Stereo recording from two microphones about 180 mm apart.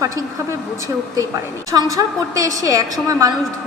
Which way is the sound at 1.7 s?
20° right (ahead or behind).